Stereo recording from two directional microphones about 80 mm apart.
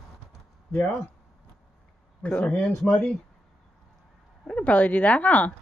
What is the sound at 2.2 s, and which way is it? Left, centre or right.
Speech, centre.